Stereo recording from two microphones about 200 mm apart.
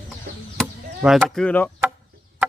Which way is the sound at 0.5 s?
Centre (ahead or behind).